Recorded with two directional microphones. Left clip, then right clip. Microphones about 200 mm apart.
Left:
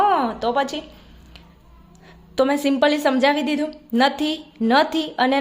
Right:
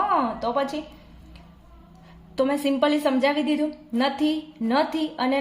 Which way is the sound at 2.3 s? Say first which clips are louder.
Left 4 dB; 40° left (ahead or behind).